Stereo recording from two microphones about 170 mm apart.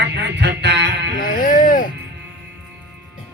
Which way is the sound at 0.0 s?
90° right.